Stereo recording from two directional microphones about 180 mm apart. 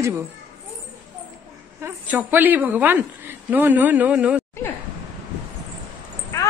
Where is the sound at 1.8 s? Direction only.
10° right (ahead or behind).